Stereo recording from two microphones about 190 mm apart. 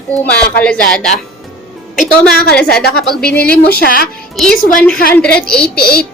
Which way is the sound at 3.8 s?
50° left (ahead or behind).